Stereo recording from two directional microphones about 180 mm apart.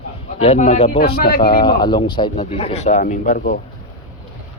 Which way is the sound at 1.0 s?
55° left (ahead or behind).